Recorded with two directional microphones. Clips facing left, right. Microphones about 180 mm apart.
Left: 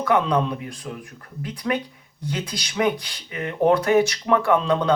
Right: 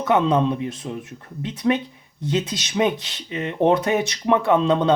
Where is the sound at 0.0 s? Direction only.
20° right (ahead or behind).